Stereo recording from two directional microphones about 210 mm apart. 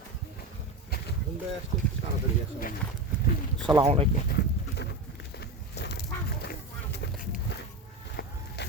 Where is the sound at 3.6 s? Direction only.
25° right (ahead or behind).